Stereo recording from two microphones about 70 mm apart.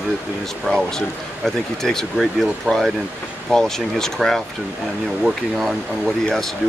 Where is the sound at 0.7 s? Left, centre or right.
Centre.